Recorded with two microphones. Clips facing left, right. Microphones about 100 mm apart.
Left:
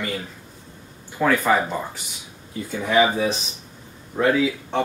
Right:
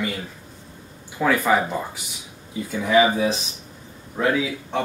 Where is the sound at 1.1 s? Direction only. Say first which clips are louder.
Even; centre (ahead or behind).